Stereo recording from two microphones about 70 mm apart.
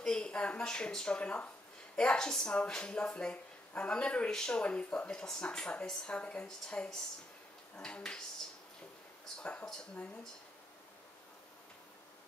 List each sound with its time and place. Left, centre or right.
0.0 s speech: centre
9.4 s speech: centre